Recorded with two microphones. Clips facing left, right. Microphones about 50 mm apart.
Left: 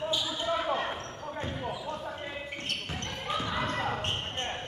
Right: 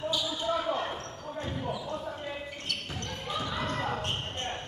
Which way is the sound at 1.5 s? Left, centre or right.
Centre.